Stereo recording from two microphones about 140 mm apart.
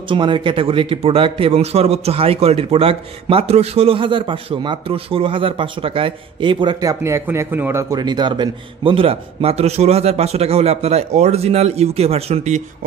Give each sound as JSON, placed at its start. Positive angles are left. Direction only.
{"t": 0.1, "sound": "speech", "side_deg": -35}
{"t": 7.9, "sound": "a man's voice", "side_deg": -30}